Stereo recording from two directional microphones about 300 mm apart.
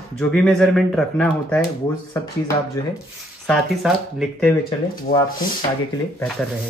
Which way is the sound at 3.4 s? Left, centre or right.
Centre.